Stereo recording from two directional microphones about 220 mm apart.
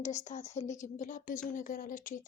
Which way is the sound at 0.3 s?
30° left (ahead or behind).